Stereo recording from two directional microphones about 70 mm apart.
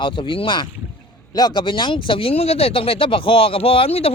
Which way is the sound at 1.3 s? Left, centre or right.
Left.